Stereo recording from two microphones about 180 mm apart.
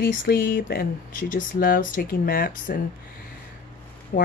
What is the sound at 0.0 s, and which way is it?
Speech, 60° left (ahead or behind).